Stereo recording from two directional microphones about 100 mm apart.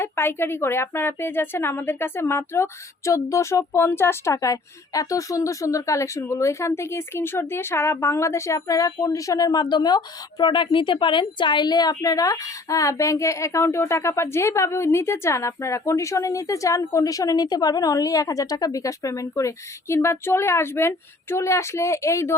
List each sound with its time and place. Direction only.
0.0 s a woman's voice: 25° left (ahead or behind)